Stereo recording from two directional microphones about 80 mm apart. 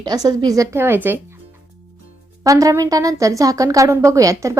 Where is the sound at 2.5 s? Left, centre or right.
Right.